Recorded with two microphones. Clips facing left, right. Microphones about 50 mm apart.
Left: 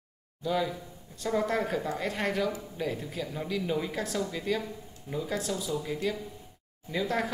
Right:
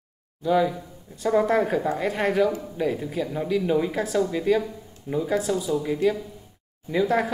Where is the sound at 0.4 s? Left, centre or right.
Centre.